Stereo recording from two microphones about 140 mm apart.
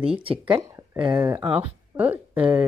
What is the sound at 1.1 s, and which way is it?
Speech, 20° right (ahead or behind).